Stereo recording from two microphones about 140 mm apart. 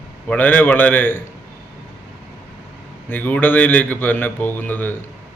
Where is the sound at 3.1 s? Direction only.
10° left (ahead or behind).